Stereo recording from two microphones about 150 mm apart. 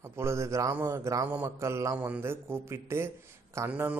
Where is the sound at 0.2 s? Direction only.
20° right (ahead or behind).